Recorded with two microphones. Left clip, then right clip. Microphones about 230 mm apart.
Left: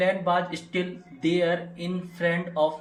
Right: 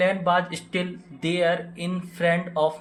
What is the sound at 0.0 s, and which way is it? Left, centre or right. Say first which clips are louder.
Speech: right 2 dB; right.